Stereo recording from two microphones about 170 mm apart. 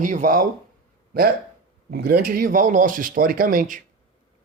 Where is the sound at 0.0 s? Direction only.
50° right (ahead or behind).